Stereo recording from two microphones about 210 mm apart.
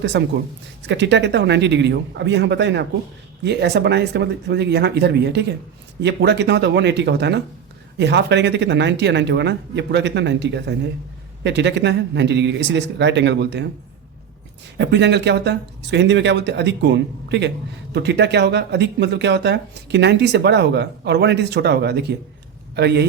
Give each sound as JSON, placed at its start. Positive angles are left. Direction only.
{"t": 0.0, "sound": "speech", "side_deg": -55}
{"t": 14.8, "sound": "speech", "side_deg": -55}